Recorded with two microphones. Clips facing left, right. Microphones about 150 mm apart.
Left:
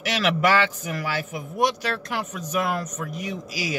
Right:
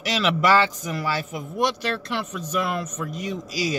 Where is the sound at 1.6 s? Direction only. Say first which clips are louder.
Left 1 dB; 45° left (ahead or behind).